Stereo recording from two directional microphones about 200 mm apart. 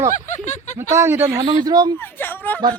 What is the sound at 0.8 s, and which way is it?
Speech, 15° right (ahead or behind).